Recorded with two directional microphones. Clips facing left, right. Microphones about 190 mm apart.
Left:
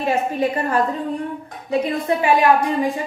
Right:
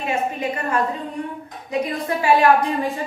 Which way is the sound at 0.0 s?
35° left (ahead or behind).